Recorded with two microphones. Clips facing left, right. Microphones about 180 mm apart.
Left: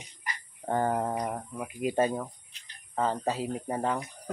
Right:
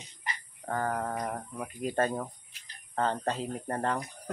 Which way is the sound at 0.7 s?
25° left (ahead or behind).